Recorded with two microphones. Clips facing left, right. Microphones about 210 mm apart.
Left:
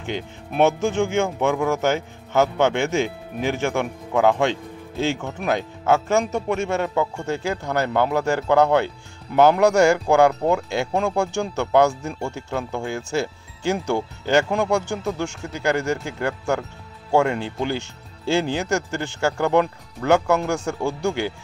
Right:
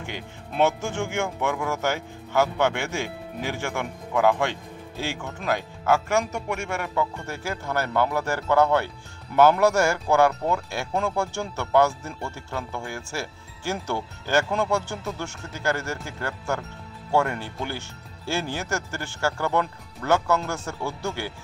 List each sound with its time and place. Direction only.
0.1 s speech: 15° left (ahead or behind)